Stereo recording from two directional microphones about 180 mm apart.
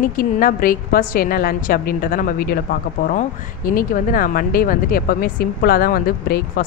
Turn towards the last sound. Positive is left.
turn(degrees=55)  # may be behind; listen again after turning